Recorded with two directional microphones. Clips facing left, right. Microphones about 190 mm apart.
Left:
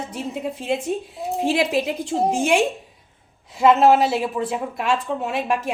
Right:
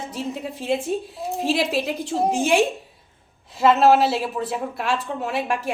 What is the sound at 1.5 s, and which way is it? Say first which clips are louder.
Speech: left 1 dB; centre (ahead or behind).